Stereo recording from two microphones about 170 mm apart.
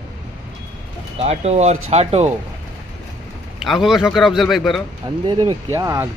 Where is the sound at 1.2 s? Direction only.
40° right (ahead or behind).